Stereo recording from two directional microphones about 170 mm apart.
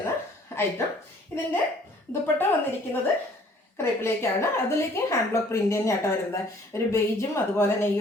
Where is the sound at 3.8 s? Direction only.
15° left (ahead or behind).